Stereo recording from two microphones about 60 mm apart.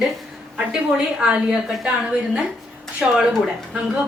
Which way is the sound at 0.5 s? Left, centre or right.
Centre.